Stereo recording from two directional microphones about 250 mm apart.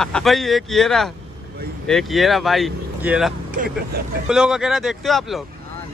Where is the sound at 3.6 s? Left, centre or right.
Right.